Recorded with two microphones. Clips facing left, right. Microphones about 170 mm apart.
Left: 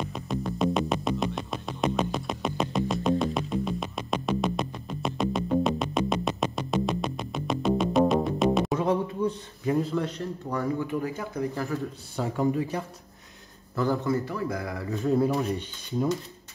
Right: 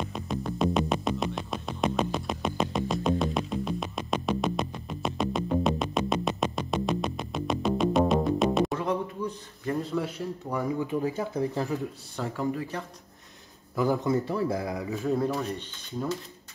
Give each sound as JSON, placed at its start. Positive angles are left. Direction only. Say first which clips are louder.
{"t": 0.1, "sound": "music", "louder": "left 1 dB", "side_deg": 0}
{"t": 8.7, "sound": "a sound", "louder": "left 4 dB", "side_deg": 20}
{"t": 9.8, "sound": "speech", "louder": "even", "side_deg": 0}
{"t": 10.6, "sound": "speech", "louder": "right 1 dB", "side_deg": -15}
{"t": 12.2, "sound": "speech", "louder": "left 4 dB", "side_deg": 15}
{"t": 13.7, "sound": "speech", "louder": "right 1 dB", "side_deg": -15}
{"t": 14.9, "sound": "speech", "louder": "left 4 dB", "side_deg": 0}